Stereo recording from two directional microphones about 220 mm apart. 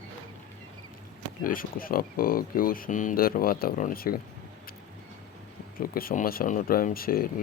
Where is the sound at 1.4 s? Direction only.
40° left (ahead or behind).